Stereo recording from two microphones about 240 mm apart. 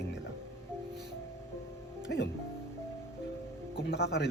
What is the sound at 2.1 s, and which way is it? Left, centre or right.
Speech, left.